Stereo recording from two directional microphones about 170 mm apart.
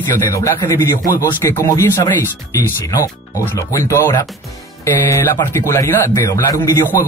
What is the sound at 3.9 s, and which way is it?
Speech, 15° left (ahead or behind).